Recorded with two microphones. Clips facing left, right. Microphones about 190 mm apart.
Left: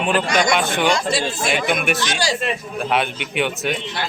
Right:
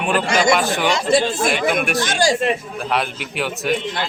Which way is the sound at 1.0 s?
50° right (ahead or behind).